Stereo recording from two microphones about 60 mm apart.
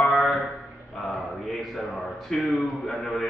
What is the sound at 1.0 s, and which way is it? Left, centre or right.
Speech, centre.